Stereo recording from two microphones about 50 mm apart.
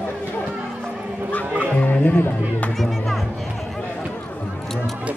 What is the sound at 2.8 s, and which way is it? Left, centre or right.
Music, centre.